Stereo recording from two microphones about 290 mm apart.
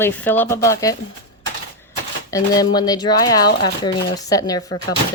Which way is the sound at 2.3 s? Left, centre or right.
Centre.